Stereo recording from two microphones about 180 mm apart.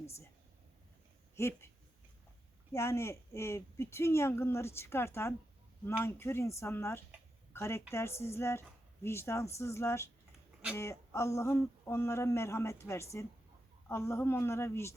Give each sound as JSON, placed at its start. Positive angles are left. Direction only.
{"t": 0.0, "sound": "a sound", "side_deg": 15}
{"t": 1.4, "sound": "speech", "side_deg": 15}
{"t": 2.7, "sound": "speech", "side_deg": 15}